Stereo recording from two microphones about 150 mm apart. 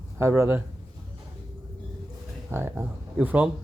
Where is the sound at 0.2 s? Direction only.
15° right (ahead or behind).